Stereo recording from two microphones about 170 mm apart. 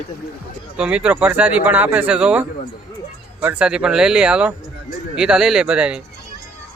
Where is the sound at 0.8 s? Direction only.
5° right (ahead or behind).